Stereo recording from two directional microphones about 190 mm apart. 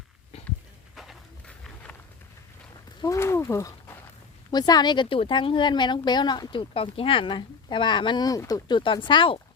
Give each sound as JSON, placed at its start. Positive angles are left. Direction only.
{"t": 0.9, "sound": "walk", "side_deg": 0}
{"t": 3.0, "sound": "speech", "side_deg": 15}